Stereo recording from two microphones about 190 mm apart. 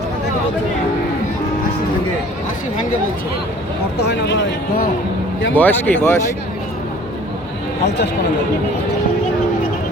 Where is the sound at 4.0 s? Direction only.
65° left (ahead or behind).